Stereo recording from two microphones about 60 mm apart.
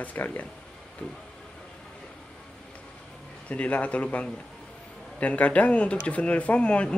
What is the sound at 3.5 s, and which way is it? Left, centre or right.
Speech, left.